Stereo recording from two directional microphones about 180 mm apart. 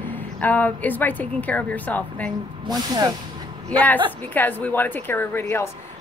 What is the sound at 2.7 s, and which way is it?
Speech, 20° right (ahead or behind).